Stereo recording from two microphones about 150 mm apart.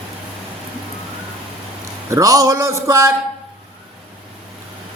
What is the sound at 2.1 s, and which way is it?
A man's voice, 20° right (ahead or behind).